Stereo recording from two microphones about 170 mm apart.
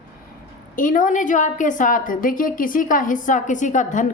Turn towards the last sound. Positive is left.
turn(degrees=45)  # may be behind; listen again after turning